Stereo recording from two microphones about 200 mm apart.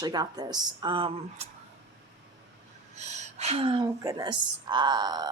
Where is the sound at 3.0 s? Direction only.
35° right (ahead or behind).